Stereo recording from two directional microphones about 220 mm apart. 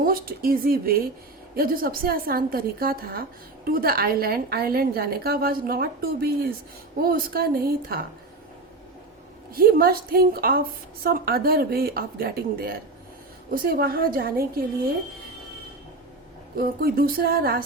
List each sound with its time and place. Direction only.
0.0 s a woman's voice: 40° right (ahead or behind)
9.6 s a woman's voice: 40° right (ahead or behind)
16.6 s a woman's voice: 45° right (ahead or behind)